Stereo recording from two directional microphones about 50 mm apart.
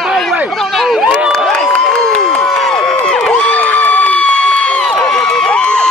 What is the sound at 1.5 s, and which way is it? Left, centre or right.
Crowd, centre.